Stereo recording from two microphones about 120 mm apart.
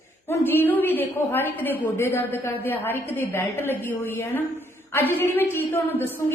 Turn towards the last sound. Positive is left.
turn(degrees=20)  # may be behind; listen again after turning